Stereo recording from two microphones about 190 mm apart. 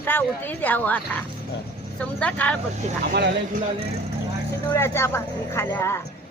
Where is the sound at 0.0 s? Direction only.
10° left (ahead or behind).